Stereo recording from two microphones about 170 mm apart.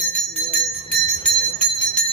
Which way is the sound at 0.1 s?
5° left (ahead or behind).